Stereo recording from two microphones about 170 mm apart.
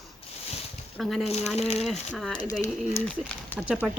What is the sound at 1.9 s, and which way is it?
Speech, centre (ahead or behind).